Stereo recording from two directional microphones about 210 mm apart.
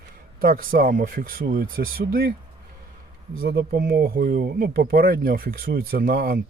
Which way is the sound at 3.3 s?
50° right (ahead or behind).